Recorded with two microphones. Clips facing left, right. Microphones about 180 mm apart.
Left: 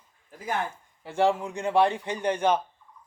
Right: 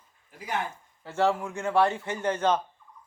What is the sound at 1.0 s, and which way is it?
A man's voice, 15° left (ahead or behind).